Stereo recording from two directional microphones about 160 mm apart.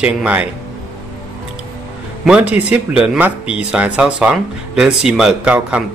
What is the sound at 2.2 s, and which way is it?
A man's voice, 10° right (ahead or behind).